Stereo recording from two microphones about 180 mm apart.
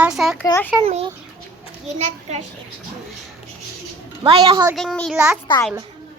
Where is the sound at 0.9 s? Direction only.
35° right (ahead or behind).